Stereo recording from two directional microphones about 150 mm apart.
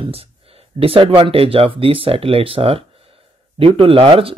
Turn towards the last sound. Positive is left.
turn(degrees=-40)  # may be behind; listen again after turning